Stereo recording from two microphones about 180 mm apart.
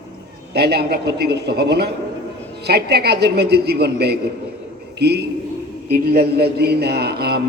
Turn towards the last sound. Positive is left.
turn(degrees=-60)  # may be behind; listen again after turning